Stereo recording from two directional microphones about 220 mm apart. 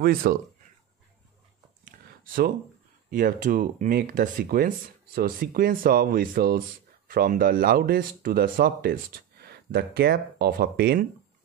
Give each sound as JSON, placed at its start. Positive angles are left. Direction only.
{"t": 0.0, "sound": "speech", "side_deg": -40}
{"t": 1.9, "sound": "a sound", "side_deg": -40}
{"t": 3.1, "sound": "speech", "side_deg": -40}